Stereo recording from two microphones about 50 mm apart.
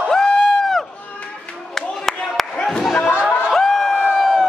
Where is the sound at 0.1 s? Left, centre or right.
Centre.